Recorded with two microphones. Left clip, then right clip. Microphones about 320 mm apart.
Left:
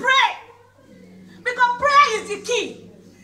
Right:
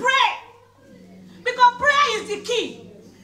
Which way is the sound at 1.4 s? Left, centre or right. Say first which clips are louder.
Right 2 dB; centre.